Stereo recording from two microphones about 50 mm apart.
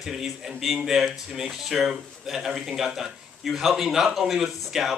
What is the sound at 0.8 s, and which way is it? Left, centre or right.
A man's voice, centre.